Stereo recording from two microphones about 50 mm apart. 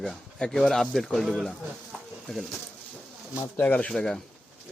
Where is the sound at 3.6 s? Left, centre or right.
Left.